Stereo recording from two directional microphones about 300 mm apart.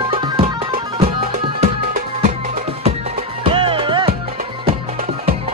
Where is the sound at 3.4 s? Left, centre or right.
Centre.